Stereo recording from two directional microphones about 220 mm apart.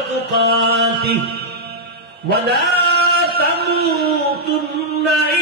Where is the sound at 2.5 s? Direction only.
50° right (ahead or behind).